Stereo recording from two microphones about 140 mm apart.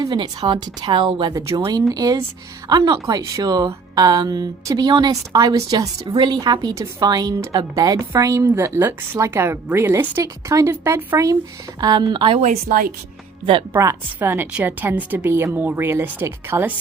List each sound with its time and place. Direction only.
0.0 s a woman's voice: 35° right (ahead or behind)
12.4 s a woman's voice: 70° right (ahead or behind)
13.4 s speech: 40° right (ahead or behind)
13.7 s a woman's voice: 15° right (ahead or behind)